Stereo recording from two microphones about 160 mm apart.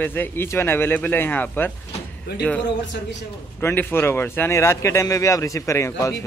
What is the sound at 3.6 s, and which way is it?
Speech, 15° left (ahead or behind).